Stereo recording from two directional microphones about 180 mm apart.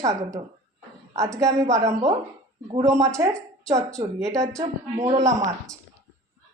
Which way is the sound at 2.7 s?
20° right (ahead or behind).